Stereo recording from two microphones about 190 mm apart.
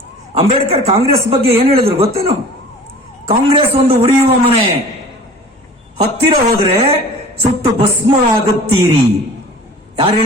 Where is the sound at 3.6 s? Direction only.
30° right (ahead or behind).